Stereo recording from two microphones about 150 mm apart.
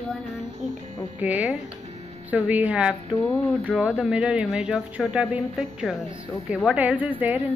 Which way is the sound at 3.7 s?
Centre (ahead or behind).